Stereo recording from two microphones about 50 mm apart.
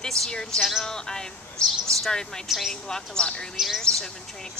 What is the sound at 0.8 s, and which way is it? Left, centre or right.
Speech, centre.